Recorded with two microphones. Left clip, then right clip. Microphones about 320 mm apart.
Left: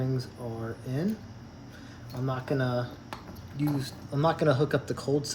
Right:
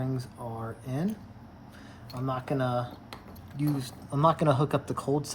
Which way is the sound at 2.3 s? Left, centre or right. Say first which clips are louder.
Right 1 dB; right.